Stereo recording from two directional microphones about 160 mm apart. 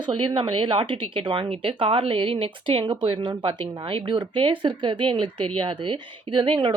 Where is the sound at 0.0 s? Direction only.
30° right (ahead or behind).